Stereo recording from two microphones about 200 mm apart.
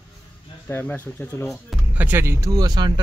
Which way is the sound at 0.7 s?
10° left (ahead or behind).